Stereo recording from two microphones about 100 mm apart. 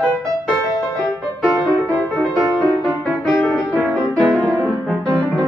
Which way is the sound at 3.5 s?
Centre (ahead or behind).